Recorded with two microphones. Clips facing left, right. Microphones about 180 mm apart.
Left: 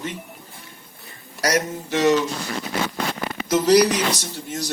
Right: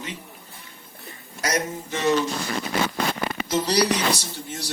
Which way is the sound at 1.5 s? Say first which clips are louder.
Left 4 dB; 80° left.